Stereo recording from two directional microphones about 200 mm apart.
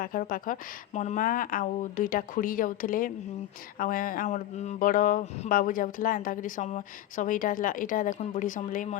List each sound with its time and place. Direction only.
0.0 s speech: 45° left (ahead or behind)